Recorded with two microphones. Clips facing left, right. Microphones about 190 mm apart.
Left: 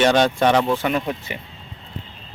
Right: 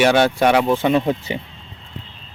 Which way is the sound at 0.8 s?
25° right (ahead or behind).